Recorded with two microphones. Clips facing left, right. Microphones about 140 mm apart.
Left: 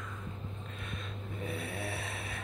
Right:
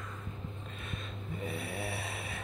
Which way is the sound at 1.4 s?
5° right (ahead or behind).